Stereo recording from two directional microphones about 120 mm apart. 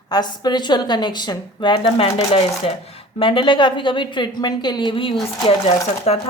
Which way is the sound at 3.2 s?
45° left (ahead or behind).